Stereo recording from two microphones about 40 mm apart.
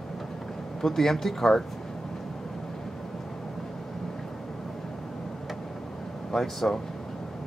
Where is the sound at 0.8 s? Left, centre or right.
Centre.